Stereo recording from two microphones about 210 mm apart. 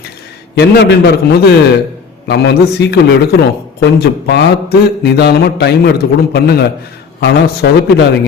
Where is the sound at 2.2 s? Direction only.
55° left (ahead or behind).